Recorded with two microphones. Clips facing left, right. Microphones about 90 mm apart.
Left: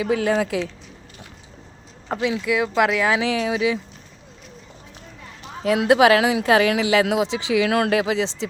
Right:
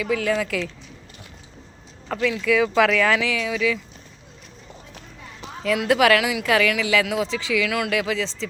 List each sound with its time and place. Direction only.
0.0 s speech: 30° left (ahead or behind)
2.0 s speech: 25° left (ahead or behind)
2.4 s speech: 10° left (ahead or behind)
3.2 s speech: 30° left (ahead or behind)
5.6 s speech: 25° left (ahead or behind)